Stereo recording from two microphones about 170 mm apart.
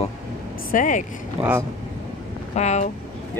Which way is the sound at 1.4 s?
15° right (ahead or behind).